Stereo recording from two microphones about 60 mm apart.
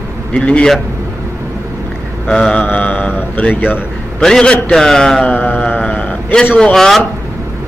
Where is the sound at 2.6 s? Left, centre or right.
Left.